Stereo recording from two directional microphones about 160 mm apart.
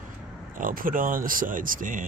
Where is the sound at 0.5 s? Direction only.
60° right (ahead or behind).